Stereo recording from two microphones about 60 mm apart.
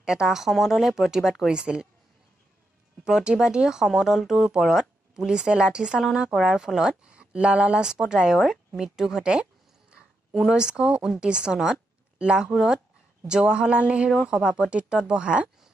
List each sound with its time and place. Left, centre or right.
0.0 s speech: centre
3.1 s speech: centre
9.3 s a sound: centre
10.4 s speech: centre